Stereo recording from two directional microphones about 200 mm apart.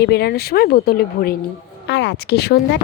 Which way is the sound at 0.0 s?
55° left (ahead or behind).